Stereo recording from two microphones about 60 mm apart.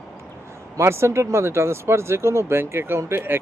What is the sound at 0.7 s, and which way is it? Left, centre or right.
Speech, right.